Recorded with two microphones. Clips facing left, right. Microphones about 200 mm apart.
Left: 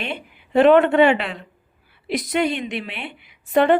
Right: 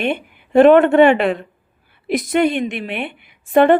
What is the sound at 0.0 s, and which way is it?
A woman's voice, 50° right (ahead or behind).